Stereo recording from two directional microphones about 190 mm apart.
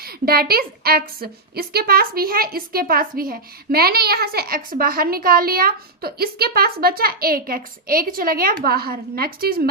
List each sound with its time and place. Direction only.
0.0 s a woman's voice: 55° right (ahead or behind)